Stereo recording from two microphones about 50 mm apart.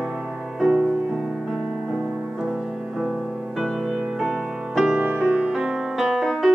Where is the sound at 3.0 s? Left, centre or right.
Centre.